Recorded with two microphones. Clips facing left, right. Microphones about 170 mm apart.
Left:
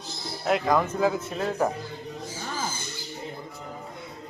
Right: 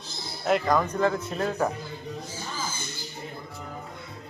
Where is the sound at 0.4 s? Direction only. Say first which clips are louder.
Even; centre (ahead or behind).